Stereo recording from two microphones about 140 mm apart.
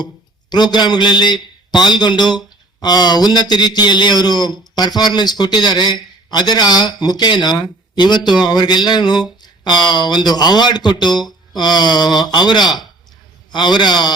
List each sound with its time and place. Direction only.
0.5 s a man's voice: 30° left (ahead or behind)